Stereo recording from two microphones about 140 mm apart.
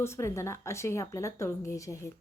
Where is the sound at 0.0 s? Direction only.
20° left (ahead or behind).